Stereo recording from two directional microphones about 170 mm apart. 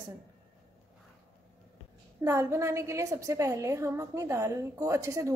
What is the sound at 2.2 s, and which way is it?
A woman's voice, 15° right (ahead or behind).